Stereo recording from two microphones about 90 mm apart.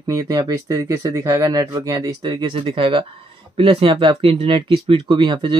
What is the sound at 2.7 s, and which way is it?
Speech, 75° right (ahead or behind).